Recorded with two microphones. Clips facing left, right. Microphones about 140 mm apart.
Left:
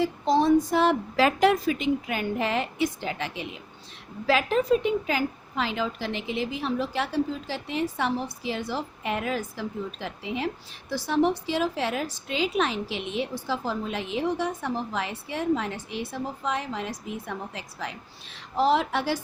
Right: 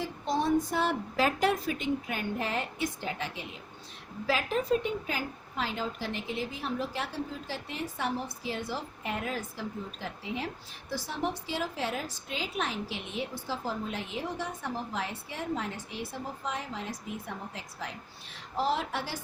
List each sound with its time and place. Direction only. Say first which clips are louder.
0.0 s a woman's voice: left 8 dB; 90° left